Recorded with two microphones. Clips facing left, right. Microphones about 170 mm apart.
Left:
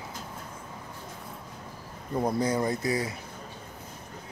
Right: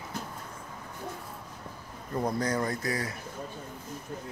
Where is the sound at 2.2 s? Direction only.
10° left (ahead or behind).